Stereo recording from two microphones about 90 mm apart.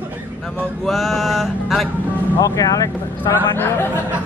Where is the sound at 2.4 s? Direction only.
40° left (ahead or behind).